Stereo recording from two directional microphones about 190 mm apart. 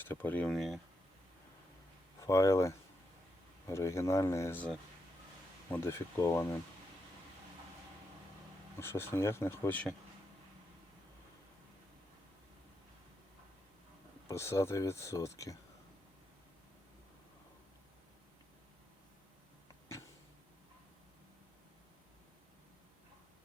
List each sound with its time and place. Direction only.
0.0 s speech: 10° left (ahead or behind)
2.2 s speech: 15° left (ahead or behind)
8.8 s speech: 10° left (ahead or behind)
14.3 s speech: 15° left (ahead or behind)